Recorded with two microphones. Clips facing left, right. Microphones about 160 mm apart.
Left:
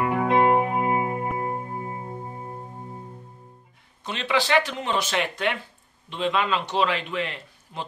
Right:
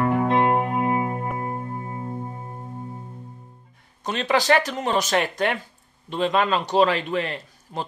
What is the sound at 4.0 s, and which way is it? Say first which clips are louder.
A man's voice: right 3 dB; 45° right (ahead or behind).